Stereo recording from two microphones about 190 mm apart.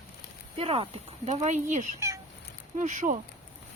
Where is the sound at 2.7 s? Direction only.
40° right (ahead or behind).